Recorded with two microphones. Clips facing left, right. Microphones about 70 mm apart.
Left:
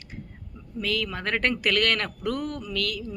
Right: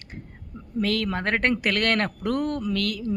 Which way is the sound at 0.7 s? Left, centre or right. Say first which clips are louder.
Right 4 dB; right.